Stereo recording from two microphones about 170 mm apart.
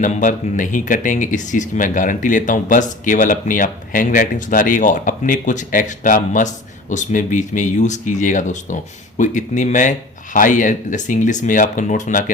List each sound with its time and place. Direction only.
0.0 s speech: 45° left (ahead or behind)